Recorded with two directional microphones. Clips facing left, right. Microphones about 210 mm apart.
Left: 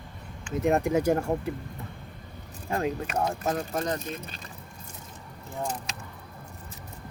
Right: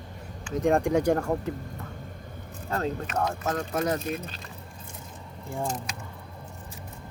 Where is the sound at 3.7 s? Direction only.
10° right (ahead or behind).